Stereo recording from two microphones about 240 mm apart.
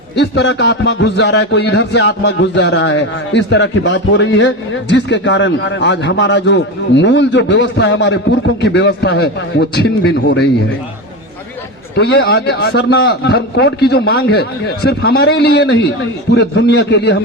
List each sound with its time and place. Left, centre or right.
0.2 s a man's voice: left
11.9 s a man's voice: left